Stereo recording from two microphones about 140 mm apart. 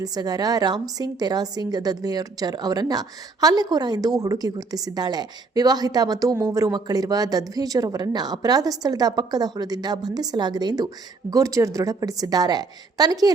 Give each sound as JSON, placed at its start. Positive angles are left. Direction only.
{"t": 0.0, "sound": "a woman's voice", "side_deg": -25}